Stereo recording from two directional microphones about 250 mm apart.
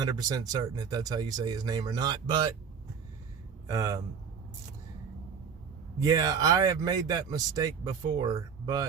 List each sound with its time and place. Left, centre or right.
0.0 s speech: centre
3.7 s speech: centre
6.1 s speech: centre